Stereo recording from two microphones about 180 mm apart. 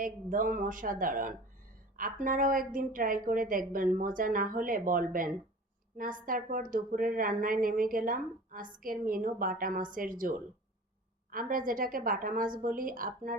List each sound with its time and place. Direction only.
0.0 s a woman's voice: 50° right (ahead or behind)